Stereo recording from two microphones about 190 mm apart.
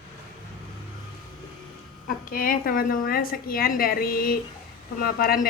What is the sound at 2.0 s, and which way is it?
A woman's voice, 50° left (ahead or behind).